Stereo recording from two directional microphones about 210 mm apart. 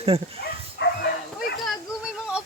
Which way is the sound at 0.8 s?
55° left (ahead or behind).